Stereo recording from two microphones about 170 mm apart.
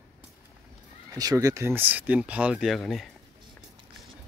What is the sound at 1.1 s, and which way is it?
Speech, 20° right (ahead or behind).